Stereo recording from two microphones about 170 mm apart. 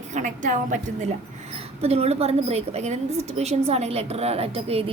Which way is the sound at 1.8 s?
35° right (ahead or behind).